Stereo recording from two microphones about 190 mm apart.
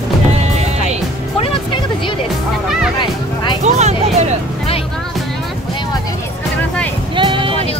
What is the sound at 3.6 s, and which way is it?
Speech, 35° right (ahead or behind).